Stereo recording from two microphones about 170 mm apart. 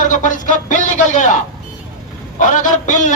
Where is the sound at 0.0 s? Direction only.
50° left (ahead or behind).